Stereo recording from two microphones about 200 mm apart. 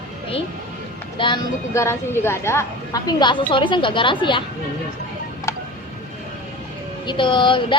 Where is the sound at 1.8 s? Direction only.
10° left (ahead or behind).